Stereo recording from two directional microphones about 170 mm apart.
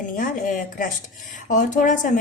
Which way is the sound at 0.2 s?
55° left (ahead or behind).